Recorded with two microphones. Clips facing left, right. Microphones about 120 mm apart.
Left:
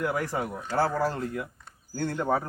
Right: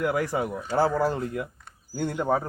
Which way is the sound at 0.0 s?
10° right (ahead or behind).